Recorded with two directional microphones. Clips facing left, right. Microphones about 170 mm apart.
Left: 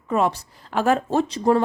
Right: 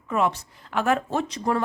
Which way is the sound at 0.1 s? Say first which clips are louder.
Left 3 dB; 35° left (ahead or behind).